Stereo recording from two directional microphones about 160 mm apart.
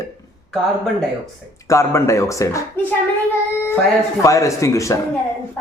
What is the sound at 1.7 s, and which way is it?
Speech, 20° left (ahead or behind).